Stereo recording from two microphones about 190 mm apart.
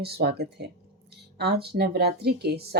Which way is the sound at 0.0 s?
55° right (ahead or behind).